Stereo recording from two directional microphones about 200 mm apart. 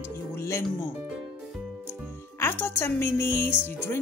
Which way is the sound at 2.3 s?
10° left (ahead or behind).